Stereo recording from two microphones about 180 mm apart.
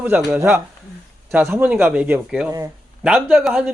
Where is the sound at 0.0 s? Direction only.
10° right (ahead or behind).